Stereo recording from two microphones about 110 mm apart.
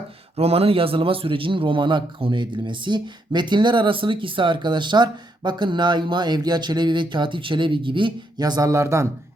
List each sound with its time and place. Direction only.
0.3 s speech: 65° right (ahead or behind); by 9.0 s 25° right (ahead or behind)